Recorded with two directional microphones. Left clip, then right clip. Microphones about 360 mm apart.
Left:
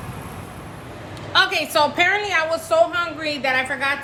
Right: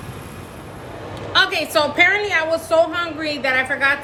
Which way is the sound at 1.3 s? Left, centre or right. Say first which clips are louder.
Right 1 dB; centre.